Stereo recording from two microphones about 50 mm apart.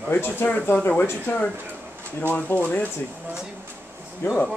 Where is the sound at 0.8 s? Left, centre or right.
Left.